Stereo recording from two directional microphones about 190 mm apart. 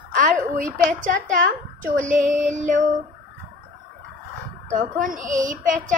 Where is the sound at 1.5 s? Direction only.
40° right (ahead or behind).